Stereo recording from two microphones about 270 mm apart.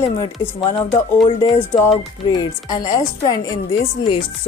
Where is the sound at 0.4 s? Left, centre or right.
Centre.